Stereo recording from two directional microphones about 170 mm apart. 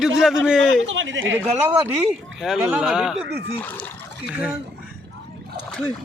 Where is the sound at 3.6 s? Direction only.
10° left (ahead or behind).